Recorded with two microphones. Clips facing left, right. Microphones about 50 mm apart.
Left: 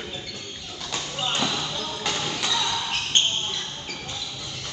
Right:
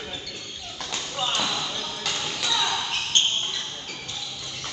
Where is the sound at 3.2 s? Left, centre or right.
Left.